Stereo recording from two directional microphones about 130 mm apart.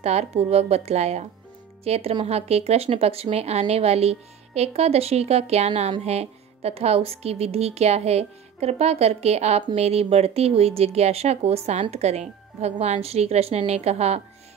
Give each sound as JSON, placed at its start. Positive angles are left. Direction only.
{"t": 0.0, "sound": "speech", "side_deg": -55}